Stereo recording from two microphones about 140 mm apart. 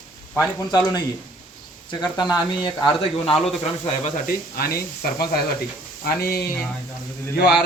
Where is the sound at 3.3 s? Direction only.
Centre (ahead or behind).